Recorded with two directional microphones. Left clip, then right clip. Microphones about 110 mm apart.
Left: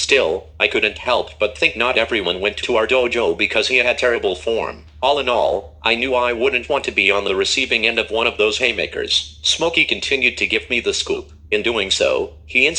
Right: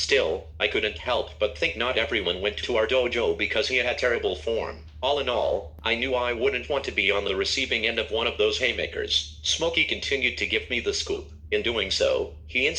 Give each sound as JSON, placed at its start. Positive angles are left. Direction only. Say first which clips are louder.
{"t": 0.0, "sound": "speech", "louder": "left 7 dB", "side_deg": 40}